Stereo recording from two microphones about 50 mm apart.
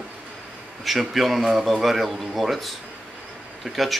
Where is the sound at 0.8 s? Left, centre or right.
Centre.